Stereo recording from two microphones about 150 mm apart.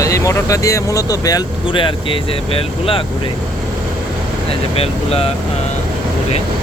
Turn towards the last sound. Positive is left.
turn(degrees=40)  # may be behind; listen again after turning